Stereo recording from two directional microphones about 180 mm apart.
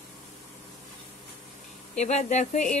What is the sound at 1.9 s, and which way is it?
Speech, 40° left (ahead or behind).